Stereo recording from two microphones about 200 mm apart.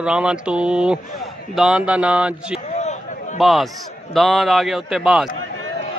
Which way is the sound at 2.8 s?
35° left (ahead or behind).